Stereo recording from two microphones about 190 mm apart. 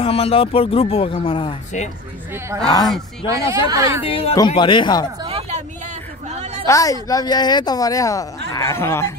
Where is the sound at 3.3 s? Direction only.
15° right (ahead or behind).